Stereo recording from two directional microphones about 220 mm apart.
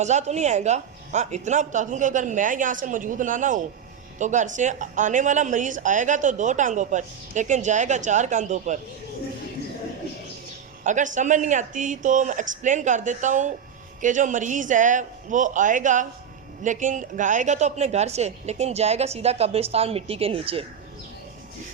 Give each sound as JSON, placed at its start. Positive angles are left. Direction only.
{"t": 0.0, "sound": "a woman's voice", "side_deg": -30}
{"t": 10.8, "sound": "a woman's voice", "side_deg": -35}